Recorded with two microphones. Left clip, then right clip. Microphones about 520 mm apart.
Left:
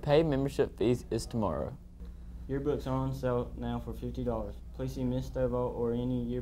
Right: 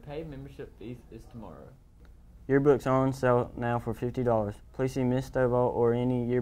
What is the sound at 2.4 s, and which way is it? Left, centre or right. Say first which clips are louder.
Speech: right 10 dB; right.